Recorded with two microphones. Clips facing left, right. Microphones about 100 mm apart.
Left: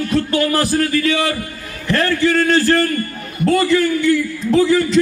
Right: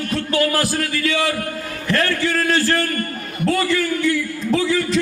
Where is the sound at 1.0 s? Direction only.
35° left (ahead or behind).